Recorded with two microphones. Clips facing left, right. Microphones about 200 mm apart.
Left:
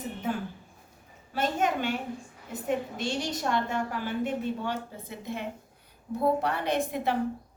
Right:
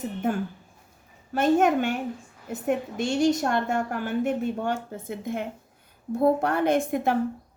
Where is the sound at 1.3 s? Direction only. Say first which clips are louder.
Right 7 dB; 50° right (ahead or behind).